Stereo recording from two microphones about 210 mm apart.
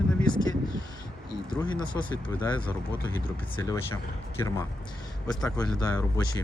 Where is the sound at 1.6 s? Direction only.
20° left (ahead or behind).